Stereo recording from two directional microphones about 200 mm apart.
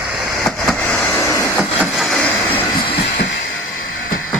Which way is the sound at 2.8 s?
30° left (ahead or behind).